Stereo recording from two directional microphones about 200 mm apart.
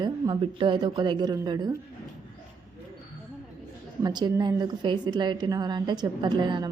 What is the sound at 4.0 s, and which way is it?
Speech, 20° right (ahead or behind).